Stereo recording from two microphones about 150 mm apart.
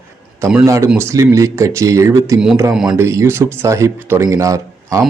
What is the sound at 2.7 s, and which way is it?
Speech, 5° right (ahead or behind).